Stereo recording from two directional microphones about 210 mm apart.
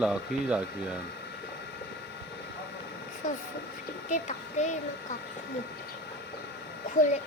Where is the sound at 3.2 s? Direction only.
35° left (ahead or behind).